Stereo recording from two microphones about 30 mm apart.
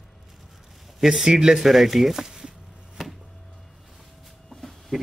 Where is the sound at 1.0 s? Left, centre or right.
Centre.